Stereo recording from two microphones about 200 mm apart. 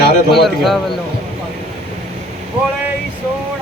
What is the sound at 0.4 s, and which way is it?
Speech, centre (ahead or behind).